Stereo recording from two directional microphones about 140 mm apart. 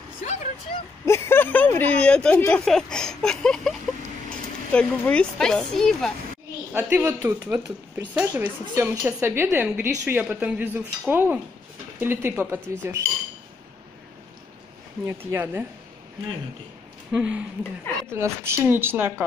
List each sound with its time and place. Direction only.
0.2 s vehicle: 55° left (ahead or behind)
1.0 s speech: 20° left (ahead or behind)
4.7 s speech: 10° left (ahead or behind)
6.7 s speech: 10° right (ahead or behind)
15.0 s speech: 15° right (ahead or behind)
17.1 s speech: 10° right (ahead or behind)